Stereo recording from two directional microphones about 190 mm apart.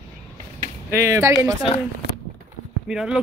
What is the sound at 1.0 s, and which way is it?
Speech, 15° right (ahead or behind).